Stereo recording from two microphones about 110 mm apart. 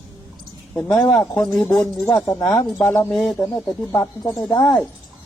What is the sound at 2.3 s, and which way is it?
Speech, 25° left (ahead or behind).